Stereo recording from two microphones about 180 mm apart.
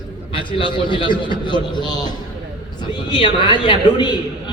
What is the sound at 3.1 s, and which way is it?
A man's voice, 25° left (ahead or behind).